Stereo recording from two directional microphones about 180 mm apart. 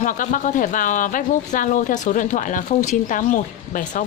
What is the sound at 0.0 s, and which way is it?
Speech, 45° left (ahead or behind).